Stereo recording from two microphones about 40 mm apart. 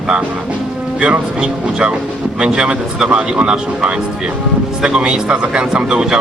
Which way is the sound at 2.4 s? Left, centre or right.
Right.